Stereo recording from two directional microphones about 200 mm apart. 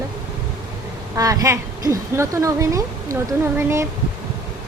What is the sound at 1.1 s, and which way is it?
A woman's voice, 15° right (ahead or behind).